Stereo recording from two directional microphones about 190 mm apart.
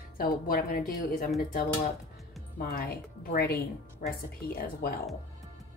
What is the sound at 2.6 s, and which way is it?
A woman's voice, 50° left (ahead or behind).